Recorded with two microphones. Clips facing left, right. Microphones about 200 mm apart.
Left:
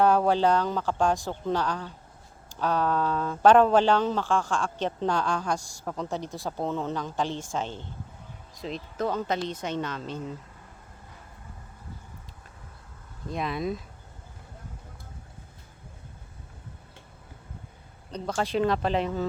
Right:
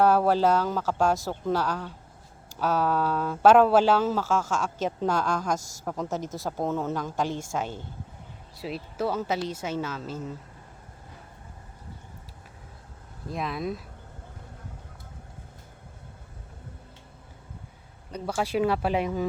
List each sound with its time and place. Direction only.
0.0 s speech: 5° right (ahead or behind)
5.5 s a woman's voice: 40° right (ahead or behind)
5.8 s speech: 5° right (ahead or behind)
13.2 s speech: centre (ahead or behind)
18.1 s speech: 10° right (ahead or behind)